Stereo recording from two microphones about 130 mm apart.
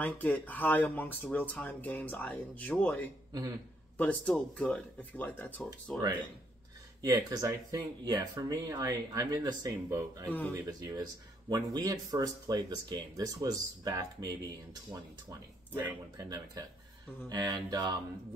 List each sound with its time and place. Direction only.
0.0 s speech: 15° left (ahead or behind)
7.0 s speech: 30° right (ahead or behind)
17.3 s mantra: 30° right (ahead or behind)